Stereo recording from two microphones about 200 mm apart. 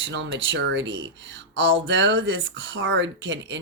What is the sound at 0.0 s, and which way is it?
Speech, 65° right (ahead or behind).